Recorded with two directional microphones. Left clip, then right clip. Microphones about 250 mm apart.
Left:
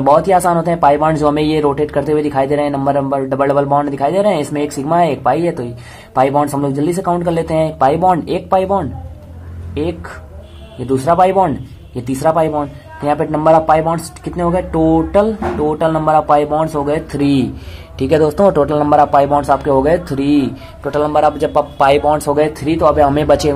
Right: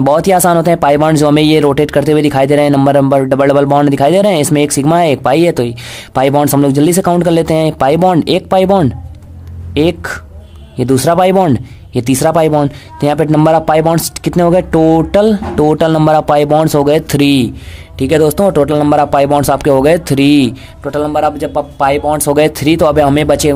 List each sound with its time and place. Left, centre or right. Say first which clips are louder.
0.0 s speech: right 1 dB; right
7.6 s speech: right 2 dB; right
17.2 s a man's voice: right 4 dB; right; by 22.1 s centre
22.1 s speech: right 3 dB; right